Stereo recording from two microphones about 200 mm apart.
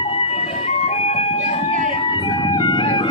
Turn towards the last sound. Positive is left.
turn(degrees=25)  # may be behind; listen again after turning